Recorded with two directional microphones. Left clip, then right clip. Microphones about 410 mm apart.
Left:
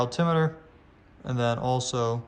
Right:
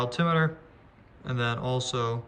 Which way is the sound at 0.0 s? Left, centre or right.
Centre.